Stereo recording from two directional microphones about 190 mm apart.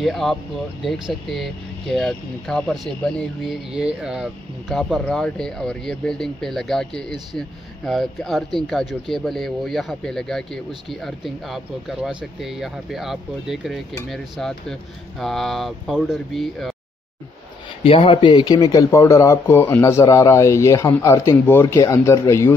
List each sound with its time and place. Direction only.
0.0 s speech: centre (ahead or behind)
17.8 s speech: 30° left (ahead or behind)